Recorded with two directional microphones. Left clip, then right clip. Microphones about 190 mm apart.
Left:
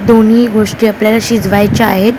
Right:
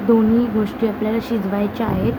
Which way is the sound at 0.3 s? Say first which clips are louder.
Left 9 dB; 35° left (ahead or behind).